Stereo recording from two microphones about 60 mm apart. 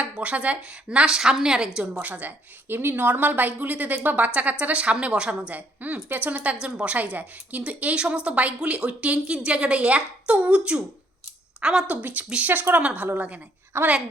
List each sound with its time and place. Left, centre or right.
0.0 s a woman's voice: right
11.6 s a woman's voice: centre
12.3 s a woman's voice: right
13.7 s a child's voice: right